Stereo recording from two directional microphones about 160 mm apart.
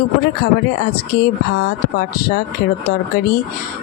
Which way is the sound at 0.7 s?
75° left (ahead or behind).